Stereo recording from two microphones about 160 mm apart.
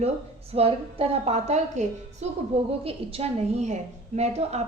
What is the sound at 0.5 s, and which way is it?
A woman's voice, 35° right (ahead or behind).